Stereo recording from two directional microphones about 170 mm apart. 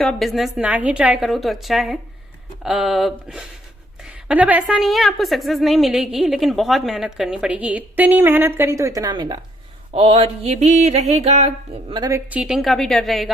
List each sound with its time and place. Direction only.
0.0 s a woman's voice: centre (ahead or behind); by 9.4 s 25° right (ahead or behind)
9.9 s a sound: 35° right (ahead or behind)
12.0 s a woman's voice: 15° right (ahead or behind)
12.4 s a woman's voice: 5° right (ahead or behind)